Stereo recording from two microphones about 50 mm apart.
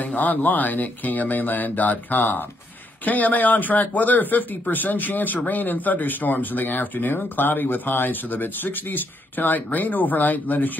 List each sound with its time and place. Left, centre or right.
0.0 s speech: left